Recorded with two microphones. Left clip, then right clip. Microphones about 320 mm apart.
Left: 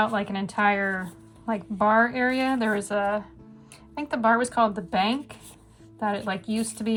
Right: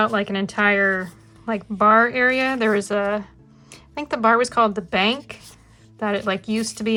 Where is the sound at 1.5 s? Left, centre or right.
Right.